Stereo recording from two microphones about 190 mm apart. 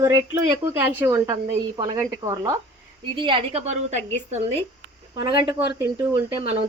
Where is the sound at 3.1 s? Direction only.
25° right (ahead or behind).